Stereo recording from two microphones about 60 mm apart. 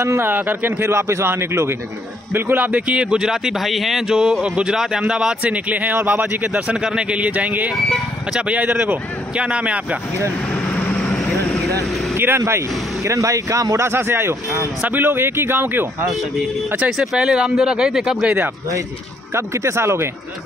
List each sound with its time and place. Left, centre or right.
0.2 s a man's voice: right; by 5.3 s centre
5.4 s speech: right
7.7 s speech: centre
8.4 s speech: right
11.8 s vehicle: centre
12.4 s a man's voice: right
13.8 s a man's voice: right
14.8 s a man's voice: right
16.1 s a man's voice: centre
19.3 s a man's voice: right